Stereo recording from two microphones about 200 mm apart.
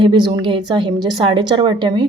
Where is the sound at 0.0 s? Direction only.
20° right (ahead or behind).